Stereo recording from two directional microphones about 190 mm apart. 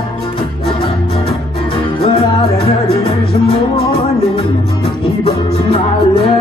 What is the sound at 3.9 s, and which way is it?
Music, 30° left (ahead or behind).